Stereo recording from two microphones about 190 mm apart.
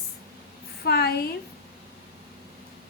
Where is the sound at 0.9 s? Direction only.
55° left (ahead or behind).